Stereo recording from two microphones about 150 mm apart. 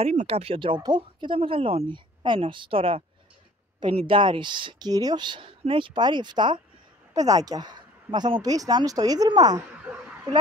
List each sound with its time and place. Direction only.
0.0 s speech: 45° right (ahead or behind)
4.1 s speech: 35° right (ahead or behind)
9.6 s a sound: 10° right (ahead or behind)